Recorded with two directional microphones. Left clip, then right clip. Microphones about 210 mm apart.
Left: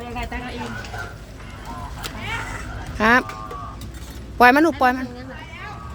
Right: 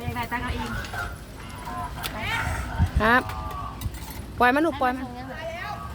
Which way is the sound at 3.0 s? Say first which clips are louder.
Left 4 dB; 30° left (ahead or behind).